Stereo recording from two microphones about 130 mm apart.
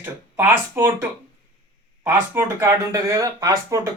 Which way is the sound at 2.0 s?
15° right (ahead or behind).